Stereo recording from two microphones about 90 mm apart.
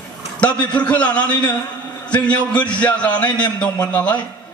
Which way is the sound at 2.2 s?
15° left (ahead or behind).